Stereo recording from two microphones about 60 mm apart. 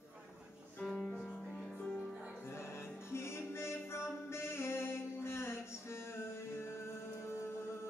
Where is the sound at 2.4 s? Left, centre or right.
Left.